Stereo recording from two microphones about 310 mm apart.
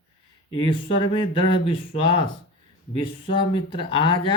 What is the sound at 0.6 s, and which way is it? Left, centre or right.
Speech, centre.